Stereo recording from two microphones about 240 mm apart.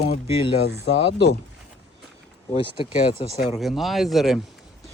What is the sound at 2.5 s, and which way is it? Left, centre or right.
Speech, left.